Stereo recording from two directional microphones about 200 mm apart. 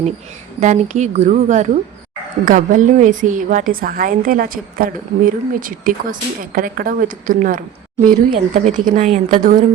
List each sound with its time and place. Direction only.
0.6 s a woman's voice: 35° right (ahead or behind)